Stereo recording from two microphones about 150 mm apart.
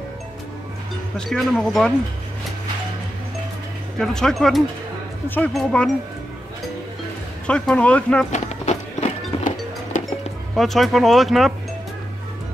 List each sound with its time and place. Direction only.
1.1 s speech: 5° left (ahead or behind)
4.0 s speech: 5° left (ahead or behind)
7.4 s speech: 5° left (ahead or behind)
8.3 s music: 50° left (ahead or behind)
10.5 s speech: centre (ahead or behind)